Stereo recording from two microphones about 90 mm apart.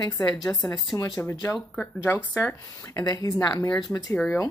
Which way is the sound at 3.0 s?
45° left (ahead or behind).